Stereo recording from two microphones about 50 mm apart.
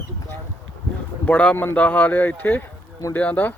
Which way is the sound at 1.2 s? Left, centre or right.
Left.